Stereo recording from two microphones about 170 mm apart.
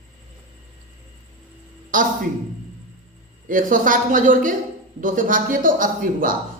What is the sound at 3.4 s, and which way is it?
A woman's voice, 50° right (ahead or behind).